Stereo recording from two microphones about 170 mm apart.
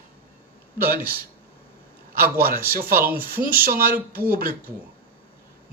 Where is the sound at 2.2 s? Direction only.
60° right (ahead or behind).